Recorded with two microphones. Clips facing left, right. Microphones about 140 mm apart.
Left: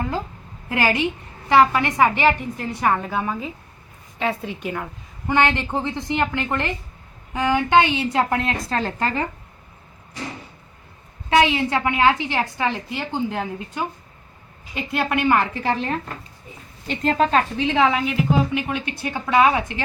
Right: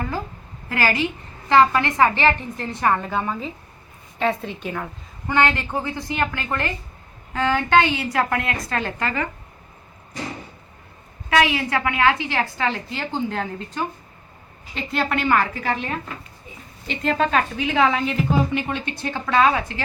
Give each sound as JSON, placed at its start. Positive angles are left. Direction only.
{"t": 0.7, "sound": "a woman's voice", "side_deg": 20}
{"t": 5.3, "sound": "a woman's voice", "side_deg": 20}
{"t": 11.3, "sound": "a woman's voice", "side_deg": 25}
{"t": 18.0, "sound": "a woman's voice", "side_deg": 5}